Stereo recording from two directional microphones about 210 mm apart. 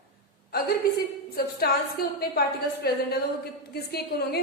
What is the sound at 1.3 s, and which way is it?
A woman's voice, 45° left (ahead or behind).